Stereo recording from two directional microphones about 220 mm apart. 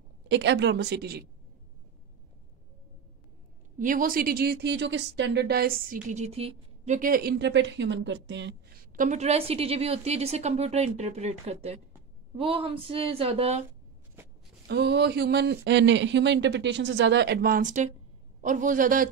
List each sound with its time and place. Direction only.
0.3 s speech: 55° right (ahead or behind)
3.7 s speech: 35° right (ahead or behind)
7.0 s speech: 40° right (ahead or behind)
8.9 s a woman's voice: 35° right (ahead or behind)
14.7 s a man's voice: 50° right (ahead or behind)